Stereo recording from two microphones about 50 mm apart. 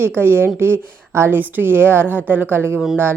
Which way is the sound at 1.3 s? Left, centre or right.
Right.